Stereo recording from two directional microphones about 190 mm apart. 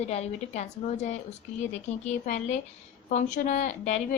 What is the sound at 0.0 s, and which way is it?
A woman's voice, 35° left (ahead or behind).